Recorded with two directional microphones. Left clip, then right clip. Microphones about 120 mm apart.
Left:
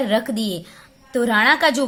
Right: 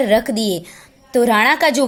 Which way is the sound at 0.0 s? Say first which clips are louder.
Right 5 dB; 35° right (ahead or behind).